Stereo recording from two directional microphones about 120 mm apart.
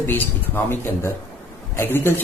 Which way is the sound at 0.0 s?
15° left (ahead or behind).